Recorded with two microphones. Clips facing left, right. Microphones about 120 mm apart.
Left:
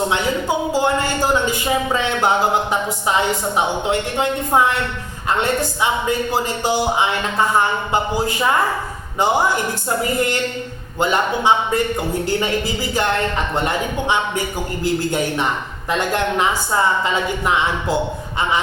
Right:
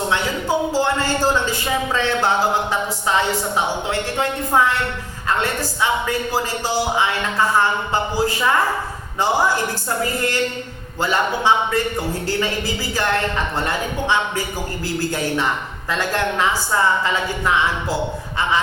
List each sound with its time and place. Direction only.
0.1 s speech: 20° left (ahead or behind)
3.8 s speech: 20° left (ahead or behind)
11.0 s speech: 20° left (ahead or behind)
15.9 s speech: 20° left (ahead or behind)